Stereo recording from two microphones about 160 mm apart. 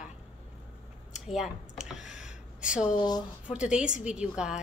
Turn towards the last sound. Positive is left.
turn(degrees=-5)  # may be behind; listen again after turning